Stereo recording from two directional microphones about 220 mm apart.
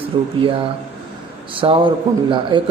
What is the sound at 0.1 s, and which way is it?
Speech, 25° right (ahead or behind).